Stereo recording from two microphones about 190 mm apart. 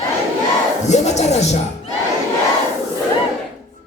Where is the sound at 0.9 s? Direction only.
35° left (ahead or behind).